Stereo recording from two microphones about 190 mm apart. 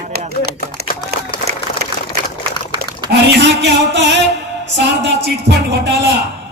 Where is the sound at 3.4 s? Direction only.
65° right (ahead or behind).